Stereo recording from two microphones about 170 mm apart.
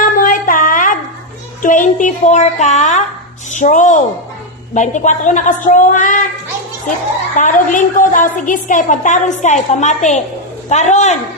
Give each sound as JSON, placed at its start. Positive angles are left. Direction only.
{"t": 0.0, "sound": "a sound", "side_deg": 55}
{"t": 3.5, "sound": "a woman's voice", "side_deg": 45}
{"t": 7.3, "sound": "a woman's voice", "side_deg": 50}